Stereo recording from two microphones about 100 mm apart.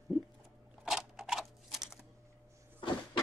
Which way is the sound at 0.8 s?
5° right (ahead or behind).